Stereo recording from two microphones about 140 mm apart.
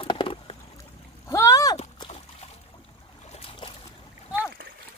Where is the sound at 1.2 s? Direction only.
20° left (ahead or behind).